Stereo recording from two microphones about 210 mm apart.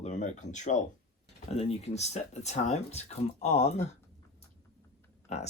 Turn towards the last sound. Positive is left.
turn(degrees=35)  # may be behind; listen again after turning